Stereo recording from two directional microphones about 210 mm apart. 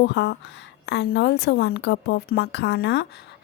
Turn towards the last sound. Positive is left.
turn(degrees=50)  # may be behind; listen again after turning